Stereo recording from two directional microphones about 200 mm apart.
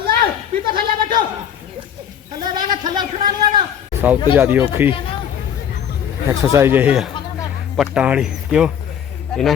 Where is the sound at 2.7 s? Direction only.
20° right (ahead or behind).